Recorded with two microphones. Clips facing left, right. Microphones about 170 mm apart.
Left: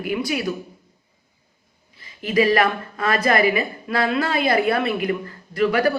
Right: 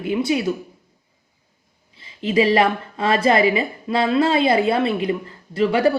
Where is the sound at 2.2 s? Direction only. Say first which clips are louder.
Right 1 dB; 25° right (ahead or behind).